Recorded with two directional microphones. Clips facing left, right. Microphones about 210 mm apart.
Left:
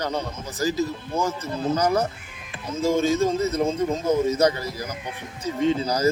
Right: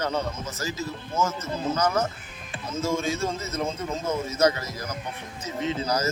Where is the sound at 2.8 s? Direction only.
35° left (ahead or behind).